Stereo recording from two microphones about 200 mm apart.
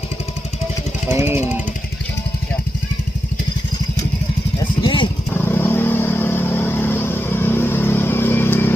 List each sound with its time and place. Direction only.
1.0 s speech: 10° right (ahead or behind)
4.8 s vehicle: 25° left (ahead or behind)
5.3 s vehicle: 10° left (ahead or behind)